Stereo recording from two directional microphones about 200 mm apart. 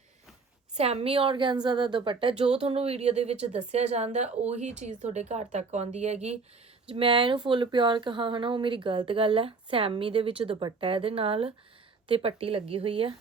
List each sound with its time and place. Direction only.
0.8 s speech: 30° right (ahead or behind)